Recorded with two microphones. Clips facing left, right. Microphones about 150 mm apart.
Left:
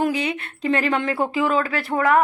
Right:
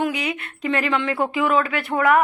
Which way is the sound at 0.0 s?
30° left (ahead or behind).